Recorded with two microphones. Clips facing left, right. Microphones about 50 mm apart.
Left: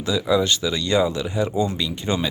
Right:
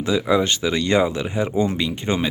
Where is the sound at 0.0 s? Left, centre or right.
Right.